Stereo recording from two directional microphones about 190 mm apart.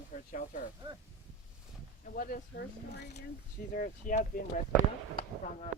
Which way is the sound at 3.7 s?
45° left (ahead or behind).